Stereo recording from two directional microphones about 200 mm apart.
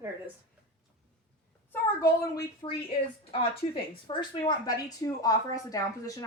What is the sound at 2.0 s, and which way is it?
A woman's voice, 20° left (ahead or behind).